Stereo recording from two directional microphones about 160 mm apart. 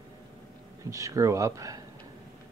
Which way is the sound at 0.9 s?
20° right (ahead or behind).